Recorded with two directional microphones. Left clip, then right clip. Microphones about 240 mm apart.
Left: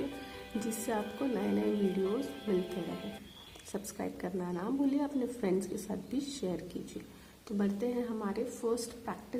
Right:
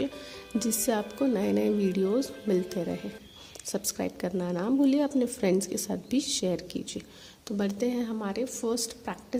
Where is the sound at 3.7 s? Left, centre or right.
Right.